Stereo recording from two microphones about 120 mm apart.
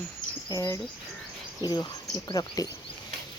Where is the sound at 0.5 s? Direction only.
25° left (ahead or behind).